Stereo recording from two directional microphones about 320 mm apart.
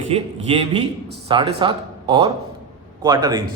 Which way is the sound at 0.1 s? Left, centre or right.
Centre.